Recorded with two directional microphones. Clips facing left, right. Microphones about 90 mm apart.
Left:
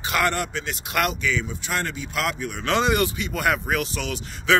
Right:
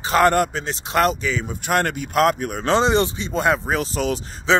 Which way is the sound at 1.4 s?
50° right (ahead or behind).